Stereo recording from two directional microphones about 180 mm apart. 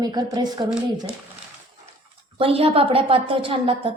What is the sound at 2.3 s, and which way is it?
A woman's voice, 30° right (ahead or behind).